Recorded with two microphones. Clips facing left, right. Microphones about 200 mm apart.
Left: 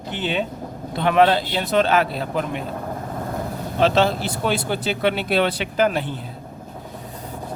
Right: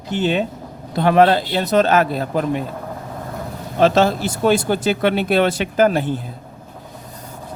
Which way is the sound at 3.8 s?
45° right (ahead or behind).